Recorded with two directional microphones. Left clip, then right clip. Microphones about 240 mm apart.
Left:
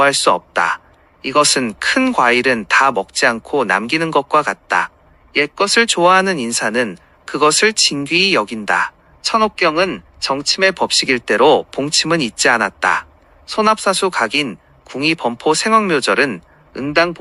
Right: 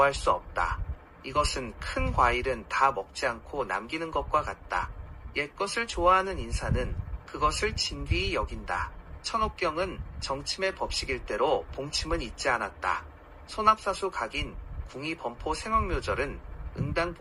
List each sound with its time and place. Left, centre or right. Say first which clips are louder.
0.0 s speech: left 11 dB; left